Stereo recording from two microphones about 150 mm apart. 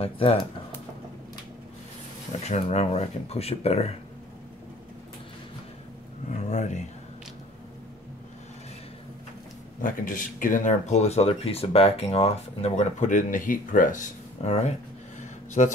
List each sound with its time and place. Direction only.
0.0 s speech: 40° left (ahead or behind)
2.4 s speech: 45° left (ahead or behind)
6.3 s a sound: 50° left (ahead or behind)
9.8 s speech: 65° left (ahead or behind); by 15.7 s 50° left (ahead or behind)